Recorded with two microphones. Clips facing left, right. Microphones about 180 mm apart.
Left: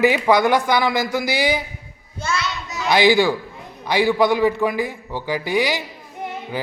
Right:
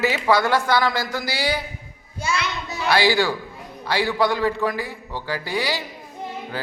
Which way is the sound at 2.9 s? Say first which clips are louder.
Left 4 dB; 15° left (ahead or behind).